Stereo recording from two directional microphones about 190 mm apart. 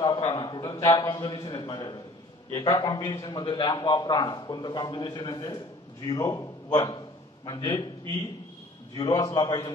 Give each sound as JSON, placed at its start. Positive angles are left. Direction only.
{"t": 0.0, "sound": "a man's voice", "side_deg": 25}
{"t": 8.9, "sound": "a man's voice", "side_deg": 25}